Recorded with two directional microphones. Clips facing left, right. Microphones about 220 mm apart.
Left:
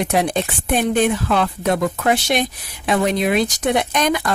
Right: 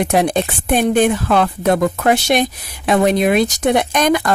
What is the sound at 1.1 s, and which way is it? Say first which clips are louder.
Speech: right 3 dB; 50° right (ahead or behind).